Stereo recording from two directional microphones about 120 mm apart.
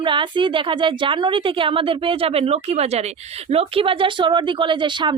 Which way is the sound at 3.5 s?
50° right (ahead or behind).